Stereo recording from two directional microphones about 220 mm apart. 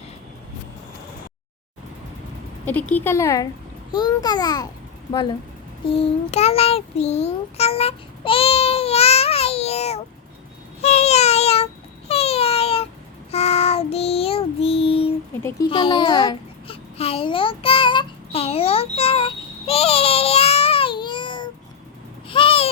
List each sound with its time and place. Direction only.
2.9 s a child's voice: 10° left (ahead or behind)
5.9 s child singing: 30° left (ahead or behind)
10.8 s a sound: 30° left (ahead or behind)
13.3 s child singing: 30° left (ahead or behind)
15.7 s babbling: 25° left (ahead or behind)
22.3 s owl: 25° left (ahead or behind)